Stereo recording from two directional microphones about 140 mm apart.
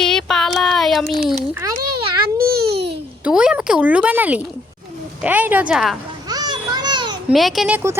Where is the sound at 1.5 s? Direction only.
20° right (ahead or behind).